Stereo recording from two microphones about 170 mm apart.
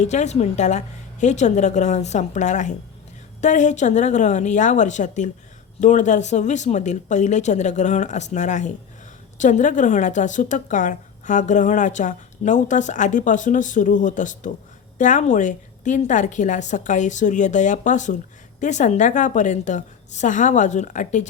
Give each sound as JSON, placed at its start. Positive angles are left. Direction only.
{"t": 0.0, "sound": "speech", "side_deg": 45}